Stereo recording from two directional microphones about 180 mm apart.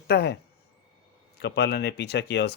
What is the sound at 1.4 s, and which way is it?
Speech, 65° left (ahead or behind).